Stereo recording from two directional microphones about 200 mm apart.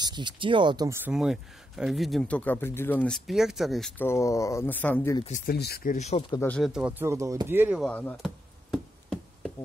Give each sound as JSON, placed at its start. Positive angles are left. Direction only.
{"t": 0.0, "sound": "speech", "side_deg": -20}
{"t": 4.0, "sound": "speech", "side_deg": 15}
{"t": 5.5, "sound": "speech", "side_deg": 50}
{"t": 5.9, "sound": "speech", "side_deg": 30}
{"t": 6.3, "sound": "speech", "side_deg": 10}
{"t": 6.6, "sound": "speech", "side_deg": -5}
{"t": 7.8, "sound": "speech", "side_deg": 10}
{"t": 8.7, "sound": "knock", "side_deg": 0}